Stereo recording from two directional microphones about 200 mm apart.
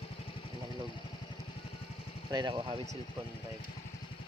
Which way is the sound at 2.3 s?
20° right (ahead or behind).